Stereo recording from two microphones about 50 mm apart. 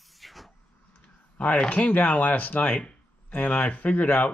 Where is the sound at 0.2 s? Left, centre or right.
Centre.